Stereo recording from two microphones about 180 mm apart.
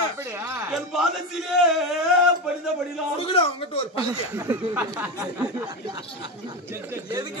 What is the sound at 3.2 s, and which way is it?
Speech, 30° left (ahead or behind).